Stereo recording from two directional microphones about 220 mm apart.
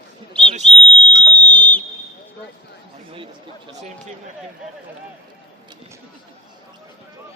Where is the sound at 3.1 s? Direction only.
25° right (ahead or behind).